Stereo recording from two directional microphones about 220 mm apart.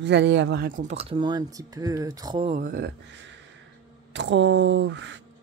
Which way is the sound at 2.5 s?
40° right (ahead or behind).